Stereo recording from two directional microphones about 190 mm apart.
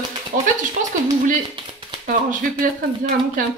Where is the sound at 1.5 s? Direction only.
25° right (ahead or behind).